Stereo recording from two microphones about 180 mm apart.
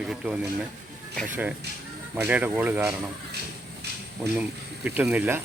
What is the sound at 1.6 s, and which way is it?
Speech, 65° right (ahead or behind).